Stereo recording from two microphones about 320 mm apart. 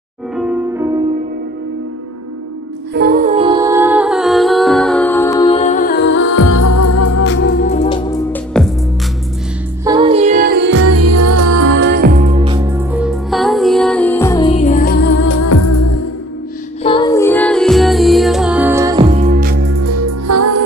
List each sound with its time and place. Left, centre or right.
0.4 s music: centre
2.9 s music: right; by 6.2 s left
6.3 s music: left
7.6 s music: centre
9.8 s music: centre; by 11.9 s right
12.0 s music: right; by 15.1 s left
15.2 s music: left
16.8 s music: centre
19.1 s music: right
19.8 s music: right